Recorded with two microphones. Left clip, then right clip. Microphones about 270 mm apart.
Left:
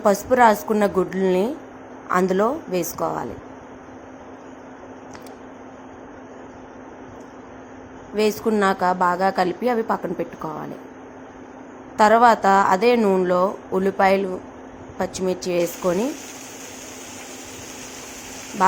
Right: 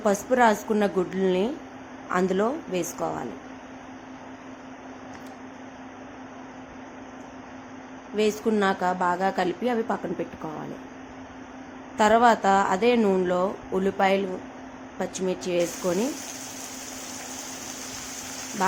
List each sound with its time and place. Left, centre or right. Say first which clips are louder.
0.0 s a woman's voice: left 5 dB; centre
8.1 s a woman's voice: left 4 dB; centre
11.9 s a woman's voice: left 5 dB; centre